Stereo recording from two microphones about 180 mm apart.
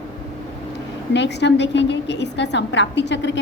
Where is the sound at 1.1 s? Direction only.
75° left (ahead or behind).